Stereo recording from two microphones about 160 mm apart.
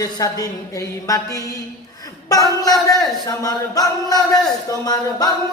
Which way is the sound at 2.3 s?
20° left (ahead or behind).